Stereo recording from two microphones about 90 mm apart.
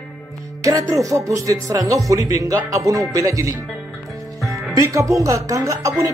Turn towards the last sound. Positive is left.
turn(degrees=-35)  # may be behind; listen again after turning